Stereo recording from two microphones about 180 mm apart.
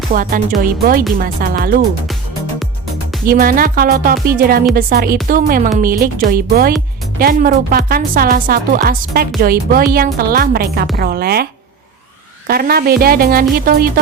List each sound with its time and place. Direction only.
0.1 s a woman's voice: 50° right (ahead or behind)
3.2 s a woman's voice: 55° right (ahead or behind)
12.5 s speech: 55° right (ahead or behind)